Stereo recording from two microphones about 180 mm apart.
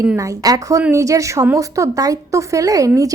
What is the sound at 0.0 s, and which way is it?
A woman's voice, 15° right (ahead or behind).